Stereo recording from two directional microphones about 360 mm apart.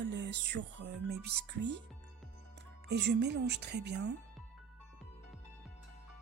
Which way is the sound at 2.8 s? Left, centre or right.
Right.